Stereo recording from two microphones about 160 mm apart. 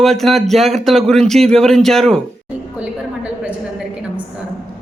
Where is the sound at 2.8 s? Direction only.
10° right (ahead or behind).